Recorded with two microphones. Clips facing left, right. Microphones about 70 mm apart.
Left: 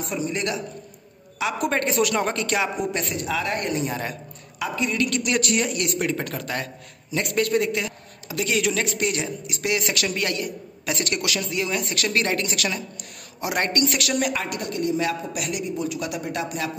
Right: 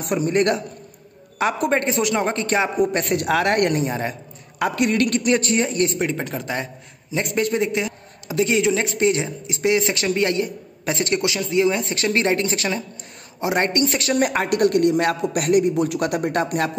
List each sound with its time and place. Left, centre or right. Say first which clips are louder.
0.0 s a man's voice: right 7 dB; right
1.7 s a man's voice: right 2 dB; right
2.8 s a woman's voice: right 7 dB; right
3.8 s a man's voice: right 4 dB; right
4.6 s a man's voice: right 5 dB; right
5.2 s a man's voice: right 4 dB; right
14.3 s a man's voice: right 10 dB; right